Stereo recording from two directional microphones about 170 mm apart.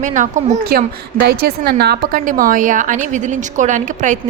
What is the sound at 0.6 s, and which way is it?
A woman's voice, 60° right (ahead or behind).